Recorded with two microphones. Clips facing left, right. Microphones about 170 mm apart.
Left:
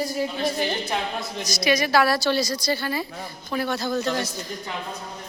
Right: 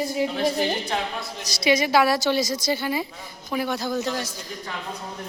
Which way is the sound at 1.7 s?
20° right (ahead or behind).